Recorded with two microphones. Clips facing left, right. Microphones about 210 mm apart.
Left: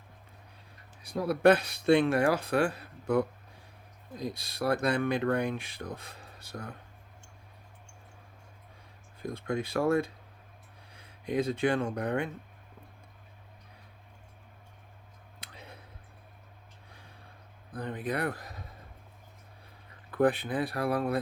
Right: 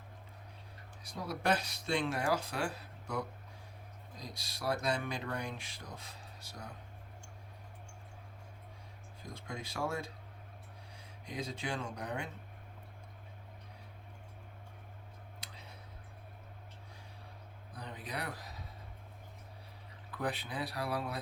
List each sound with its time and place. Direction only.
1.0 s speech: 60° left (ahead or behind)
9.2 s speech: 60° left (ahead or behind)
15.4 s clicking: 60° left (ahead or behind)
17.7 s speech: 50° left (ahead or behind)
20.1 s speech: 55° left (ahead or behind)